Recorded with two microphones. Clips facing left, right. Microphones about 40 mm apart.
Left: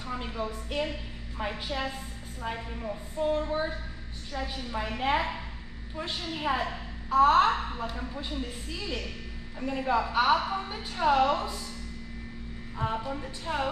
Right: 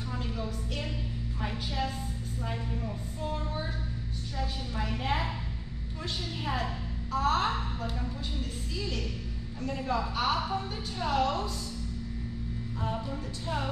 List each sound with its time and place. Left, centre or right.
0.1 s a woman's voice: left
12.7 s a woman's voice: left